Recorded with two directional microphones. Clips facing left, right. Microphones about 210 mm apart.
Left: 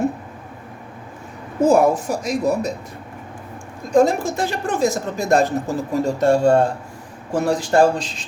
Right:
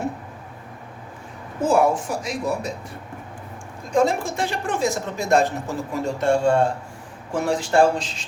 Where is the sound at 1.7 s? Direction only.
40° left (ahead or behind).